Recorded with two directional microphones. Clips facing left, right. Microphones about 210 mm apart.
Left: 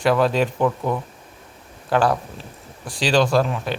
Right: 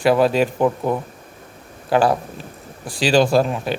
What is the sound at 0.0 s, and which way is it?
Speech, 5° right (ahead or behind).